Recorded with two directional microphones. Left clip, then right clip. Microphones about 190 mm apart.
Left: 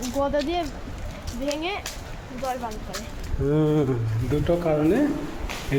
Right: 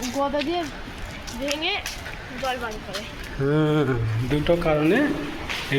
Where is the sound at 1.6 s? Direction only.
55° left (ahead or behind).